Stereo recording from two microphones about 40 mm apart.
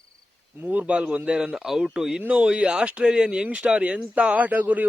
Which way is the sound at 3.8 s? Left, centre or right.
Right.